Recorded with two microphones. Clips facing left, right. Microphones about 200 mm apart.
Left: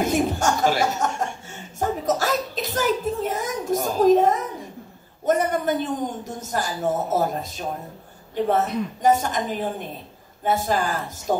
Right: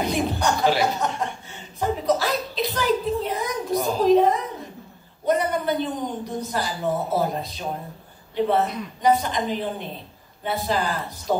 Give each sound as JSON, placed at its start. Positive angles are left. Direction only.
{"t": 0.0, "sound": "chuckle", "side_deg": 45}
{"t": 5.2, "sound": "a man's voice", "side_deg": 45}